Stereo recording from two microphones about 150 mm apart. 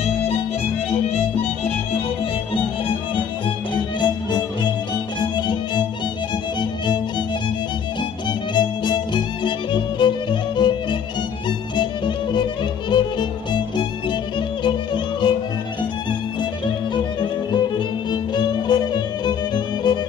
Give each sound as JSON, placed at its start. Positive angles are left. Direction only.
{"t": 0.8, "sound": "violin", "side_deg": 40}
{"t": 4.0, "sound": "music", "side_deg": 30}
{"t": 5.2, "sound": "violin", "side_deg": 30}
{"t": 8.3, "sound": "violin", "side_deg": 30}
{"t": 11.4, "sound": "music", "side_deg": 30}
{"t": 12.9, "sound": "violin", "side_deg": 30}
{"t": 14.6, "sound": "music", "side_deg": 30}
{"t": 16.1, "sound": "violin", "side_deg": 30}